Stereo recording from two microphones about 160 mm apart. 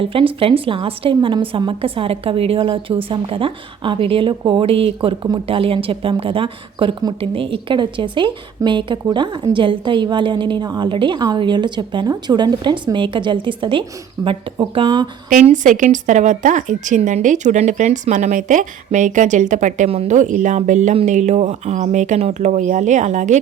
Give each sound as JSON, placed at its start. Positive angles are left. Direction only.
{"t": 0.0, "sound": "a woman's voice", "side_deg": -35}
{"t": 15.4, "sound": "a woman's voice", "side_deg": -55}